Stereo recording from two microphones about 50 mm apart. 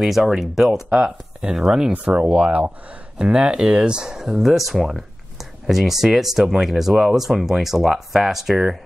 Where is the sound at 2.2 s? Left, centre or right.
Centre.